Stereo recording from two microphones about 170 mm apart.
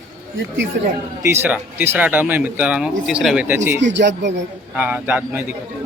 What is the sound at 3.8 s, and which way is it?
Speech, 90° right.